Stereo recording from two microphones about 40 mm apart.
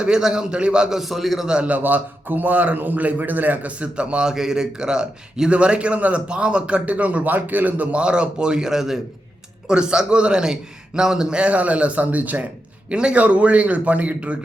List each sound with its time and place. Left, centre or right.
0.0 s a man's voice: centre
0.9 s a man's voice: centre
1.5 s a man's voice: right
1.7 s a man's voice: right
4.3 s a man's voice: centre; by 7.3 s right
7.3 s a man's voice: right
8.0 s a man's voice: right
11.3 s speech: right
12.9 s a man's voice: right
13.1 s speech: right